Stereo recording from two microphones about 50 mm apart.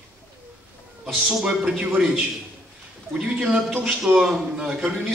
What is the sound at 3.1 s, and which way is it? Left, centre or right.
A man's voice, centre.